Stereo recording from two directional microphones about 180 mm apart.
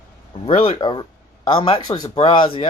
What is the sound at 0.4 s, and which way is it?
Speech, 35° left (ahead or behind).